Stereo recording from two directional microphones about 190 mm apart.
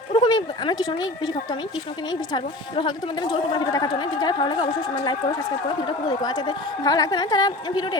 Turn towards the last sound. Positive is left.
turn(degrees=20)  # may be behind; listen again after turning